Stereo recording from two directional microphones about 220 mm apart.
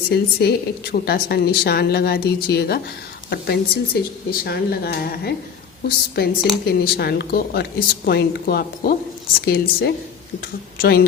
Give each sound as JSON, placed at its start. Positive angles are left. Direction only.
{"t": 0.1, "sound": "a woman's voice", "side_deg": 45}